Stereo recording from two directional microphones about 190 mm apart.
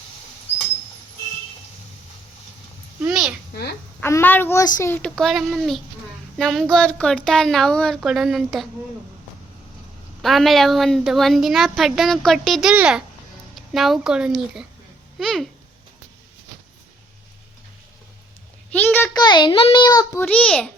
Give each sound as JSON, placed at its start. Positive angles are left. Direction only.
{"t": 3.0, "sound": "a sound", "side_deg": -5}
{"t": 3.5, "sound": "a woman's voice", "side_deg": 55}
{"t": 4.0, "sound": "a child's voice", "side_deg": 10}
{"t": 10.2, "sound": "a woman's voice", "side_deg": 0}
{"t": 18.7, "sound": "a child's voice", "side_deg": 10}
{"t": 19.1, "sound": "a child's voice", "side_deg": 25}
{"t": 20.2, "sound": "a woman's voice", "side_deg": 5}